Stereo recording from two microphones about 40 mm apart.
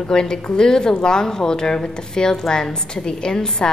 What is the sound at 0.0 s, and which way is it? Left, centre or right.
Speech, centre.